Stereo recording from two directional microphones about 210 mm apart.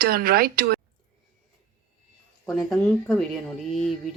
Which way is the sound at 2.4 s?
5° left (ahead or behind).